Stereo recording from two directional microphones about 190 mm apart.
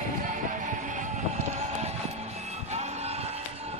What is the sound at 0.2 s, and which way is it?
Music, 40° right (ahead or behind).